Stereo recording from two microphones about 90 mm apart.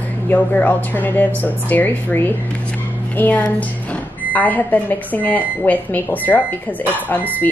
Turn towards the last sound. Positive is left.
turn(degrees=20)  # may be behind; listen again after turning